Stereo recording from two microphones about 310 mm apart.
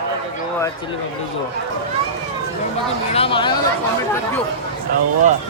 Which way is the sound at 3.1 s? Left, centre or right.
Centre.